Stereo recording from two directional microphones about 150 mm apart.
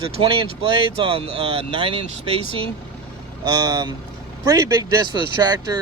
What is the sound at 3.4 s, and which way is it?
Speech, 25° right (ahead or behind).